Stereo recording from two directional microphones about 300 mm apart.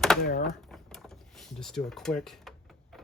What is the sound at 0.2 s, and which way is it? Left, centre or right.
Speech, left.